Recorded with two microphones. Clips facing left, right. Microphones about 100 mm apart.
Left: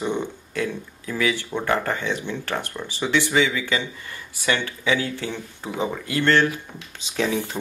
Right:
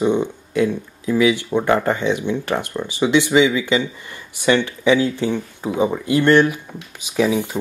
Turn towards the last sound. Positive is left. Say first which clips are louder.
# right 6 dB
turn(degrees=-10)  # may be behind; listen again after turning